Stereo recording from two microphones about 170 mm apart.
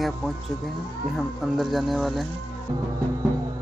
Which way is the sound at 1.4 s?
Centre (ahead or behind).